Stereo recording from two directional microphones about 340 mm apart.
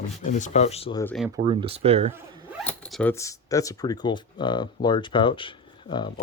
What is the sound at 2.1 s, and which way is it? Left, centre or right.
Speech, centre.